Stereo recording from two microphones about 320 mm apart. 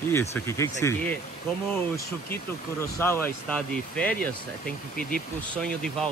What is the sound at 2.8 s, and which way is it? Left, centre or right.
Speech, centre.